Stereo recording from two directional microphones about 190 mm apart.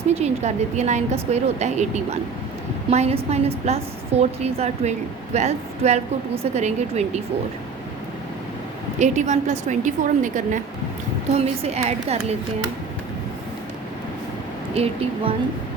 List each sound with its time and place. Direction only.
0.1 s a woman's voice: 35° right (ahead or behind)
9.0 s a woman's voice: 40° right (ahead or behind)
14.8 s a woman's voice: 30° right (ahead or behind)